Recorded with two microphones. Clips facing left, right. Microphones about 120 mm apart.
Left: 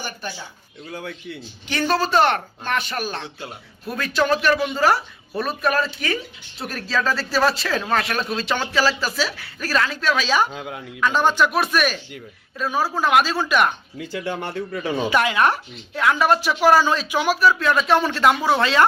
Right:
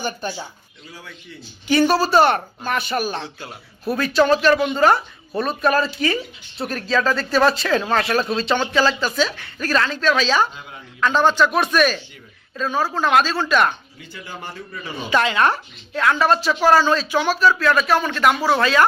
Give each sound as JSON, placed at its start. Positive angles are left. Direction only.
{"t": 0.0, "sound": "speech", "side_deg": -20}
{"t": 0.9, "sound": "a man's voice", "side_deg": 60}
{"t": 1.6, "sound": "speech", "side_deg": -10}
{"t": 8.4, "sound": "speech", "side_deg": -20}
{"t": 8.7, "sound": "speech", "side_deg": 5}
{"t": 10.5, "sound": "a man's voice", "side_deg": 90}
{"t": 11.0, "sound": "speech", "side_deg": 10}
{"t": 14.0, "sound": "speech", "side_deg": 80}
{"t": 15.1, "sound": "speech", "side_deg": 10}